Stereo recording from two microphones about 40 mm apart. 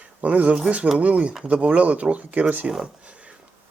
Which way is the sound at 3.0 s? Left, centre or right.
Right.